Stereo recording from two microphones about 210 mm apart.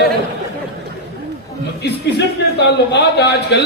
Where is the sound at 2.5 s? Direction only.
55° left (ahead or behind).